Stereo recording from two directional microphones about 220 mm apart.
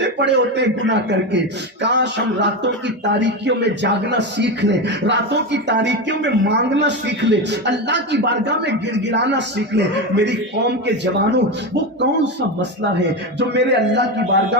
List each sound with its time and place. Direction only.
0.0 s speech: 55° right (ahead or behind)
13.5 s speech: 50° right (ahead or behind)